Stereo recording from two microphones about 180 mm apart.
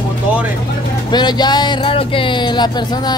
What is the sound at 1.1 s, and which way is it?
Speech, 25° left (ahead or behind).